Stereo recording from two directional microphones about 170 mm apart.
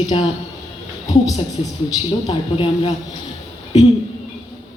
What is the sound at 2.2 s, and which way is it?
Speech, 30° left (ahead or behind).